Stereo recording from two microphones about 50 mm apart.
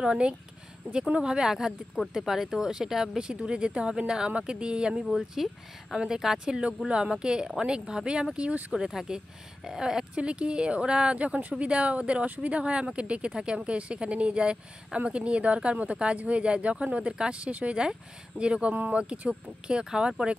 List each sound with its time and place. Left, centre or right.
0.0 s speech: centre
1.2 s speech: centre
5.1 s speech: centre; by 8.7 s right
8.7 s speech: centre